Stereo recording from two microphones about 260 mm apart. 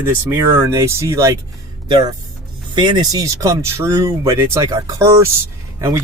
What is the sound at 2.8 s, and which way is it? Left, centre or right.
Speech, centre.